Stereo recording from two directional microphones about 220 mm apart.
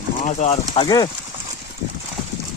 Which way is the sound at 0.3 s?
30° left (ahead or behind).